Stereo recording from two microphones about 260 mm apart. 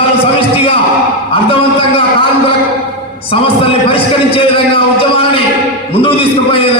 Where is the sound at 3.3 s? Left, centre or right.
Left.